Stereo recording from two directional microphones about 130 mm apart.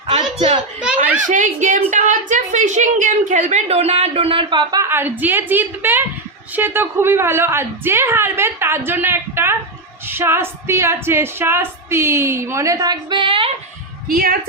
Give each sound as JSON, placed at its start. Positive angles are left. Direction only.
{"t": 0.3, "sound": "a sound", "side_deg": -65}
{"t": 1.3, "sound": "a woman's voice", "side_deg": -80}
{"t": 4.8, "sound": "a woman's voice", "side_deg": -15}